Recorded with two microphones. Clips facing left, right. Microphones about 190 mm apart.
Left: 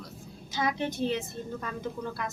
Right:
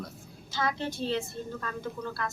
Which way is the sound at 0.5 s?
15° left (ahead or behind).